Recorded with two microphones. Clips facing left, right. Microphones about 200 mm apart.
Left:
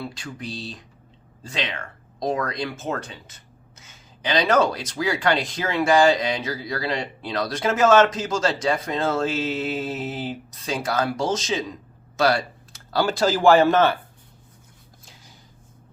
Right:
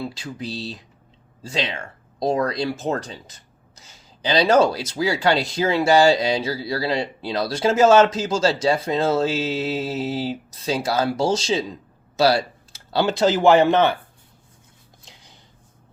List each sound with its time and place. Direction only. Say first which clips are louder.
0.0 s speech: right 3 dB; 25° right (ahead or behind)